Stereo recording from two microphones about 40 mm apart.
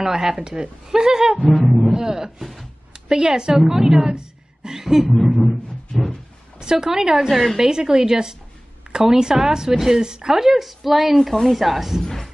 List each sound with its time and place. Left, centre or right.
0.0 s speech: centre
1.7 s speech: centre
2.0 s speech: centre
5.4 s a sound: centre
6.6 s speech: centre
7.3 s speech: centre
7.6 s speech: centre
10.3 s speech: centre
12.0 s a man's voice: centre